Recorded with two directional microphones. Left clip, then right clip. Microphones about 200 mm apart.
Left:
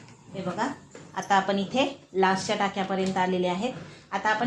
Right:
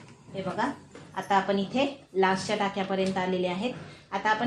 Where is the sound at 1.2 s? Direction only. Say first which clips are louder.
Left 2 dB; 35° left (ahead or behind).